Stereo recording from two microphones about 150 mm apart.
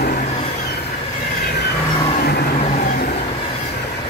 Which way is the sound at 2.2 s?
90° left.